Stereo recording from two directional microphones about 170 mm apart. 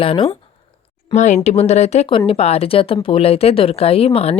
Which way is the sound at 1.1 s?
45° left (ahead or behind).